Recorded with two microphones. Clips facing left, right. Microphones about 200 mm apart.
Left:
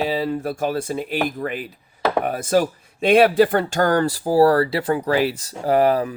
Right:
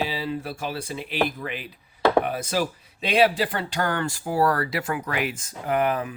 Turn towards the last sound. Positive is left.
turn(degrees=35)  # may be behind; listen again after turning